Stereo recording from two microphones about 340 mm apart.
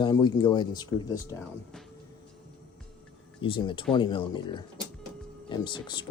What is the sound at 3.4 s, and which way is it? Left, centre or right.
Speech, centre.